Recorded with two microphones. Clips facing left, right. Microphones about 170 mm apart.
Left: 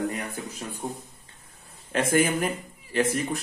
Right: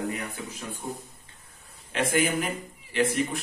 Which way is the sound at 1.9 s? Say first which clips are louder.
Left 3 dB; 45° left (ahead or behind).